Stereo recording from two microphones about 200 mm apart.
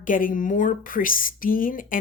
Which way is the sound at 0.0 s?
40° left (ahead or behind).